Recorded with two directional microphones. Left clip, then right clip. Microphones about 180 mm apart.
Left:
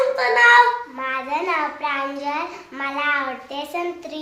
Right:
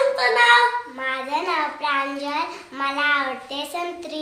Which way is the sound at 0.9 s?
20° left (ahead or behind).